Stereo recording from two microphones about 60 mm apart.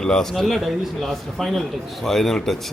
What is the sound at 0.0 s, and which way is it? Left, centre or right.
A man's voice, centre.